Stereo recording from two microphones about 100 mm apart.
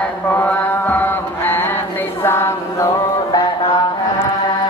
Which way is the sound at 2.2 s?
25° left (ahead or behind).